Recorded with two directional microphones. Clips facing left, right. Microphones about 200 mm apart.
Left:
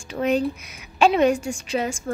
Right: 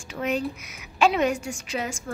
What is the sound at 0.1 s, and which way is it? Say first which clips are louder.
A woman's voice: left 5 dB; 30° left (ahead or behind).